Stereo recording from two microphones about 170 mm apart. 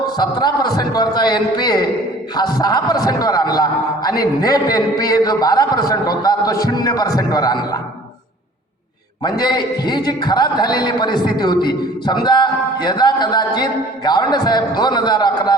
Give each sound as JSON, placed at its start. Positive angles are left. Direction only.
{"t": 0.2, "sound": "a man's voice", "side_deg": 25}
{"t": 9.4, "sound": "a man's voice", "side_deg": 25}